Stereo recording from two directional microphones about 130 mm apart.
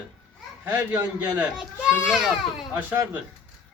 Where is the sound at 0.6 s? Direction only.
15° right (ahead or behind).